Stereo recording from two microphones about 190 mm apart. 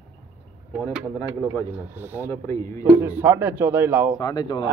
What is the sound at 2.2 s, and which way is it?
Speech, 15° left (ahead or behind).